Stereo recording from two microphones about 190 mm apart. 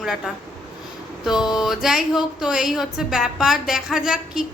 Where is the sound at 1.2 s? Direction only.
Centre (ahead or behind).